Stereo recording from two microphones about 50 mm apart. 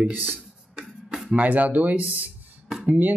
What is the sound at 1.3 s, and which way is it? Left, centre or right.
Speech, right.